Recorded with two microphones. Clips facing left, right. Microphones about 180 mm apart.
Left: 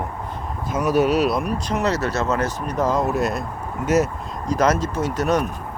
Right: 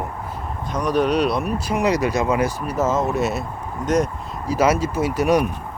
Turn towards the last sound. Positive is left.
turn(degrees=-10)  # may be behind; listen again after turning